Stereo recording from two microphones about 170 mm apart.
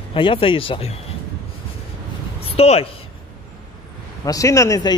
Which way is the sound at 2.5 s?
35° left (ahead or behind).